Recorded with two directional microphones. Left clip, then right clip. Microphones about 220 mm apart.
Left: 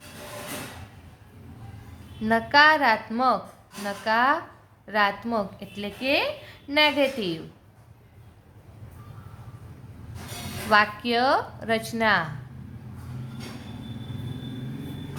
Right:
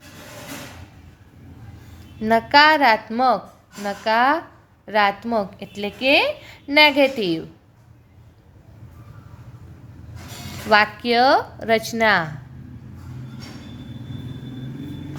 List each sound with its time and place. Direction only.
2.2 s a woman's voice: 30° right (ahead or behind)
10.7 s speech: 30° right (ahead or behind)